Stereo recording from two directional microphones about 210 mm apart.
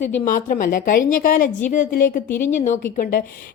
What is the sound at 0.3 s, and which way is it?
A woman's voice, 40° left (ahead or behind).